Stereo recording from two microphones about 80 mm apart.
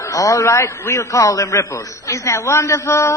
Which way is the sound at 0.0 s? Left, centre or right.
Left.